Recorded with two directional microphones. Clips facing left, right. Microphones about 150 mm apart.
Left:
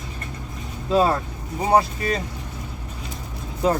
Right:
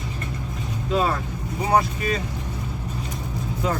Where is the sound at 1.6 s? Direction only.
30° left (ahead or behind).